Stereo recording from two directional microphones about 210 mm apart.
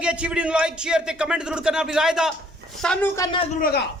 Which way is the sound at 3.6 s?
45° left (ahead or behind).